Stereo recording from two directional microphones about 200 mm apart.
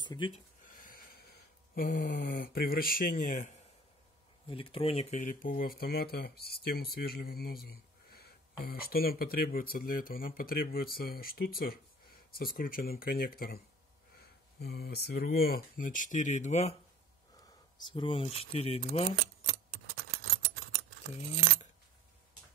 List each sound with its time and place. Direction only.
0.0 s speech: 20° left (ahead or behind)
0.7 s a sound: 45° left (ahead or behind)
4.5 s speech: 25° left (ahead or behind)
17.7 s speech: 25° left (ahead or behind)